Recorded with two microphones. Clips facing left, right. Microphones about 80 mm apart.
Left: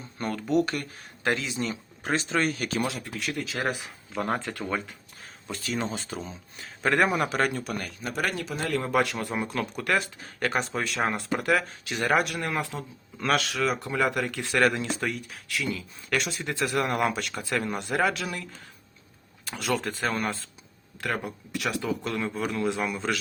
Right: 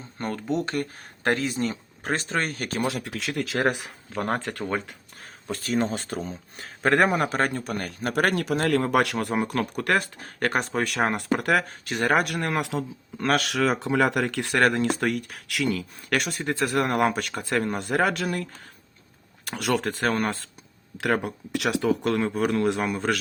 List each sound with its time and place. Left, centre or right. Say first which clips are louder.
0.2 s speech: left 2 dB; right
0.9 s a man's voice: right 1 dB; right
3.0 s speech: right 3 dB; right
4.1 s a man's voice: right 1 dB; right
4.4 s speech: right 2 dB; right
4.9 s a man's voice: right 2 dB; right
13.1 s speech: right 2 dB; right
14.5 s a man's voice: right 2 dB; right
19.5 s speech: right 3 dB; right
21.0 s speech: right 6 dB; right